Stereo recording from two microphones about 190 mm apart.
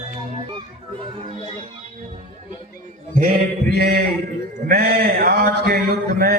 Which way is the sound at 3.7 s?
55° right (ahead or behind).